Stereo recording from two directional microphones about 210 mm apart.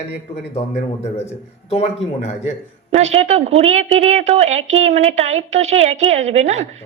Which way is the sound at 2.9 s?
30° right (ahead or behind).